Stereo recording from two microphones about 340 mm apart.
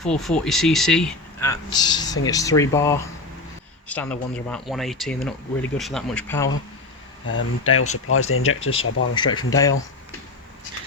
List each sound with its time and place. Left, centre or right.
0.0 s a man's voice: centre
7.3 s speech: left
9.1 s a man's voice: centre